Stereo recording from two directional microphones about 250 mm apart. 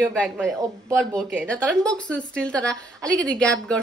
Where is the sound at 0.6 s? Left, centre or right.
Centre.